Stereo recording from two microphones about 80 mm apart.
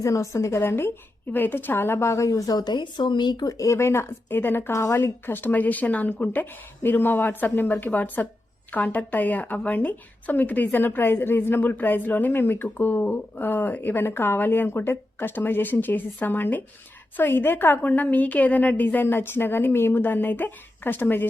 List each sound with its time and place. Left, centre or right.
0.0 s a woman's voice: left
3.7 s speech: left
4.7 s speech: left